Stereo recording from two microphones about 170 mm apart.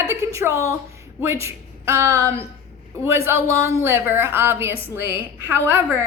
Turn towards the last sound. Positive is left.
turn(degrees=-15)  # may be behind; listen again after turning